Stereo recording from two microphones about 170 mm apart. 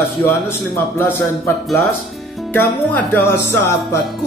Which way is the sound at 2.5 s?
10° left (ahead or behind).